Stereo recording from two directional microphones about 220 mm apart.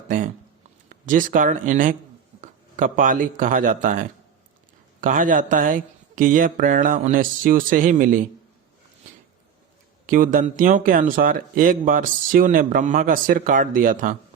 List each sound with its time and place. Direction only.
0.9 s speech: 35° right (ahead or behind)
10.1 s speech: 40° right (ahead or behind)